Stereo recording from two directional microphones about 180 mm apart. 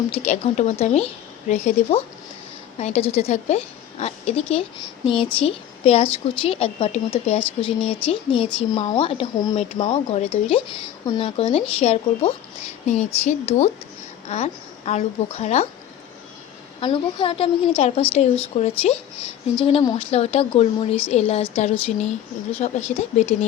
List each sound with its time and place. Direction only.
0.1 s a woman's voice: 35° left (ahead or behind)
16.8 s a woman's voice: 30° left (ahead or behind)